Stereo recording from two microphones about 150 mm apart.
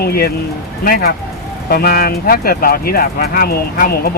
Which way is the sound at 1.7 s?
90° left.